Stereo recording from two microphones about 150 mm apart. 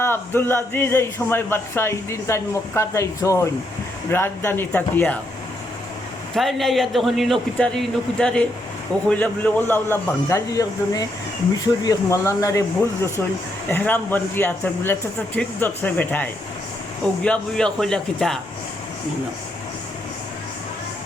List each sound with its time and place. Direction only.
0.0 s a man's voice: 15° left (ahead or behind)
6.3 s a man's voice: centre (ahead or behind)